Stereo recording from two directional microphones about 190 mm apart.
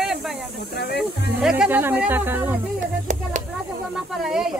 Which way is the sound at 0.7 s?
55° left (ahead or behind).